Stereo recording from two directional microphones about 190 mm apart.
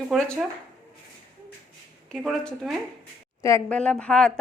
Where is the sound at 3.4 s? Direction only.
10° left (ahead or behind).